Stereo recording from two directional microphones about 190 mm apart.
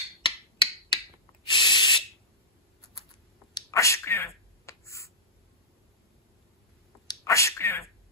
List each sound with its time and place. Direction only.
0.2 s finger snapping: 25° left (ahead or behind)
1.5 s spray: 25° left (ahead or behind)
3.5 s finger snapping: 15° left (ahead or behind)
7.1 s a sound: 15° left (ahead or behind)